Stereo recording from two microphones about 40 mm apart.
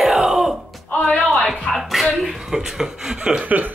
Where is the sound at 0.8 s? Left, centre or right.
Left.